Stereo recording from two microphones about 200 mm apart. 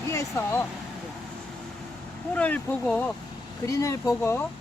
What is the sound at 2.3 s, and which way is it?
Speech, 5° left (ahead or behind).